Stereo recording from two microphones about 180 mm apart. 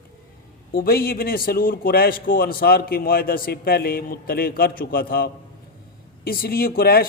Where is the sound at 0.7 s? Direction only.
55° left (ahead or behind).